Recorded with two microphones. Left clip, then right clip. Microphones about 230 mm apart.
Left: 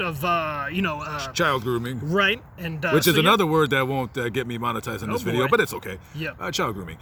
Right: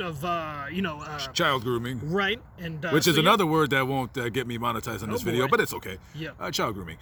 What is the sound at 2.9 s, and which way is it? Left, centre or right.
Speech, right.